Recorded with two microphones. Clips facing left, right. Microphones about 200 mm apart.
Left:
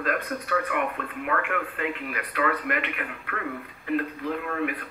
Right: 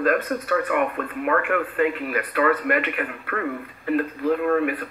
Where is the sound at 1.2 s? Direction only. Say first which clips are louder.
Right 6 dB; 50° right (ahead or behind).